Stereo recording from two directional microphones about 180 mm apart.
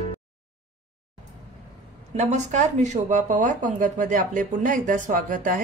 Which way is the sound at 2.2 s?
40° right (ahead or behind).